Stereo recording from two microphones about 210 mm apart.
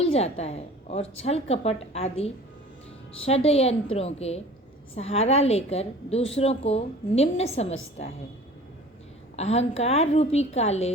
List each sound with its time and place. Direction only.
0.0 s a woman's voice: 30° left (ahead or behind)
9.3 s a woman's voice: 30° left (ahead or behind)